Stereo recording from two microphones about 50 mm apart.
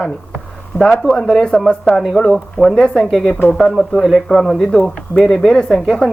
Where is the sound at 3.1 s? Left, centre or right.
Centre.